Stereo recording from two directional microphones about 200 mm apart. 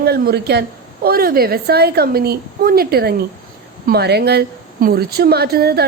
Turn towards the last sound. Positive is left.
turn(degrees=-50)  # may be behind; listen again after turning